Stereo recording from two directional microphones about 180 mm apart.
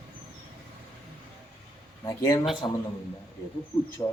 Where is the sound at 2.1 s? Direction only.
20° left (ahead or behind).